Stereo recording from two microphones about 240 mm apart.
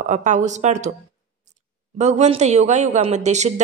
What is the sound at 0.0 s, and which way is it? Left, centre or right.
Speech, right.